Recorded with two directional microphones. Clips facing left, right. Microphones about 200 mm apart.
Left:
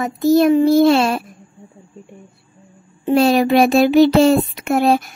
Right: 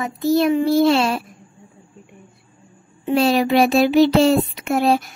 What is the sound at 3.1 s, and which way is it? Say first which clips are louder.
Child singing: left 3 dB; 45° left (ahead or behind).